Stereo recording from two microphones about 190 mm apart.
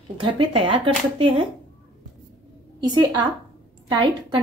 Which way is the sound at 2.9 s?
25° right (ahead or behind).